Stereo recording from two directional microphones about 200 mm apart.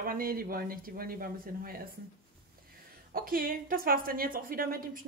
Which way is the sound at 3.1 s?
45° right (ahead or behind).